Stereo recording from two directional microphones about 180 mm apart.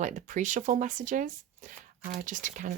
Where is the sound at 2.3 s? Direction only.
45° right (ahead or behind).